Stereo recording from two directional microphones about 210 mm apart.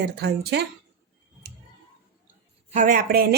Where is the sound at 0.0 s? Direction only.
50° right (ahead or behind).